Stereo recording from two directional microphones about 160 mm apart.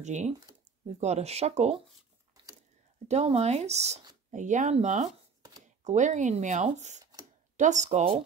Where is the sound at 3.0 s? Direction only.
40° right (ahead or behind).